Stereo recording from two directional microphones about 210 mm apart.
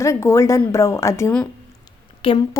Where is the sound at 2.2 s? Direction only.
20° left (ahead or behind).